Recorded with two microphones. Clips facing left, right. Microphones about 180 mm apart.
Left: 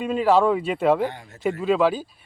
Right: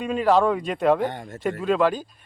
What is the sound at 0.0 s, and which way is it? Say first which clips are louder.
Speech: left 1 dB; 5° left (ahead or behind).